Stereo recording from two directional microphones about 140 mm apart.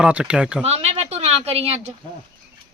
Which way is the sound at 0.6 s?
45° right (ahead or behind).